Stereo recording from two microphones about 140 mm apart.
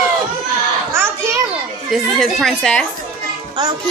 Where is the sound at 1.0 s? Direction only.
20° right (ahead or behind).